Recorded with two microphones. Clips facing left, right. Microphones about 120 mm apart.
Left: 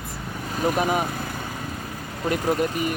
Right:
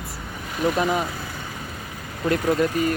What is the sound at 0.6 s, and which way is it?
Speech, 40° left (ahead or behind).